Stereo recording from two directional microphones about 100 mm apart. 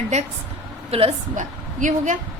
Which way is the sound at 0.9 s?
90° right.